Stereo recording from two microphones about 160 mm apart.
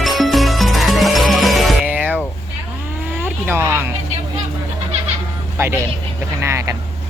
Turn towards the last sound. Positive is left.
turn(degrees=-20)  # may be behind; listen again after turning